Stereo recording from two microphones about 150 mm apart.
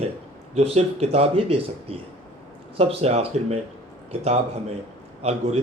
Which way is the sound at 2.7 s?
45° right (ahead or behind).